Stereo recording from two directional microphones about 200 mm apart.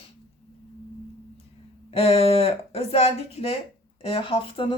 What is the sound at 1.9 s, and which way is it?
Speech, 30° left (ahead or behind).